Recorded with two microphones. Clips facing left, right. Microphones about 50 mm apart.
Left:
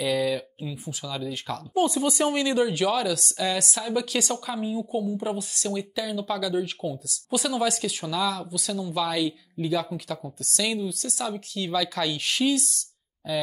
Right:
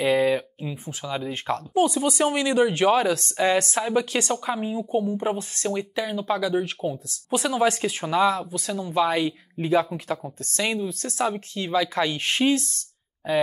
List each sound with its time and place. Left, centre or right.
0.0 s speech: right